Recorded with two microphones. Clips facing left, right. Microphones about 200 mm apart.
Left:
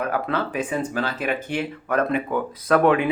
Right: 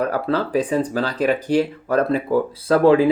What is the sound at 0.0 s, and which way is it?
Speech, 35° right (ahead or behind).